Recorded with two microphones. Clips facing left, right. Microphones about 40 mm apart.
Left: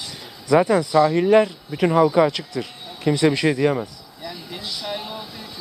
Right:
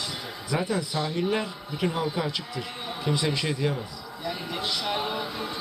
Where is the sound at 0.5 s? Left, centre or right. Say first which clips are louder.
Left 11 dB; left.